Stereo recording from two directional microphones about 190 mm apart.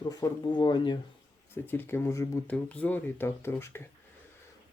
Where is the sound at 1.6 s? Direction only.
10° left (ahead or behind).